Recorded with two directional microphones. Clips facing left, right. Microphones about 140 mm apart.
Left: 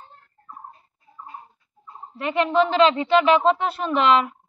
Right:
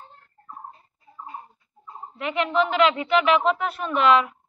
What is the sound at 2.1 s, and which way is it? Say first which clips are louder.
A woman's voice: left 3 dB; 35° left (ahead or behind).